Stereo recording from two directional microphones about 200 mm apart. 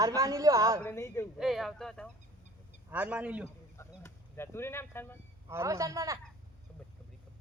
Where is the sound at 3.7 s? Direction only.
15° left (ahead or behind).